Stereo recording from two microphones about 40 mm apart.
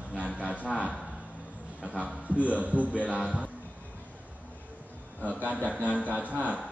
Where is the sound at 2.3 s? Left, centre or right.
Right.